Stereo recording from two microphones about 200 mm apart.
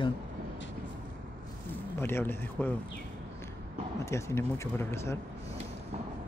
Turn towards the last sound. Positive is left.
turn(degrees=15)  # may be behind; listen again after turning